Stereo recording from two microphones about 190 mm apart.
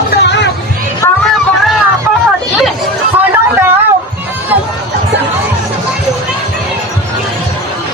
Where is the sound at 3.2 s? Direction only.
10° right (ahead or behind).